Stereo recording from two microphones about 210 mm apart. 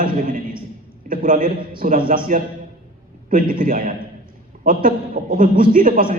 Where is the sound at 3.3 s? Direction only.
40° right (ahead or behind).